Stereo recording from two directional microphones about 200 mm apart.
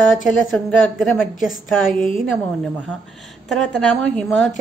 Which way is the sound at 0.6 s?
5° left (ahead or behind).